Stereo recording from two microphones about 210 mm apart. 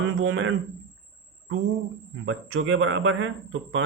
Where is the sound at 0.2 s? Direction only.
70° right (ahead or behind).